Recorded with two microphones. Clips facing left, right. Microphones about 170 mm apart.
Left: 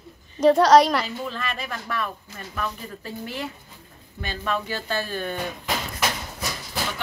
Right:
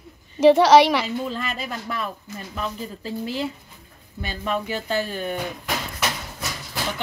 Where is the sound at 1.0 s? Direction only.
20° right (ahead or behind).